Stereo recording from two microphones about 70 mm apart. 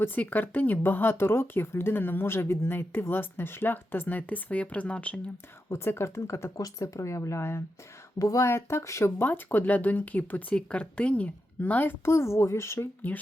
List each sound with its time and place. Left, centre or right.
0.0 s speech: left
5.6 s speech: left
8.2 s speech: left
8.4 s speech: left
9.0 s speech: left